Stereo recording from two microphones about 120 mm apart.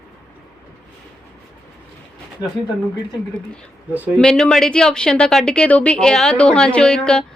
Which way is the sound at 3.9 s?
15° right (ahead or behind).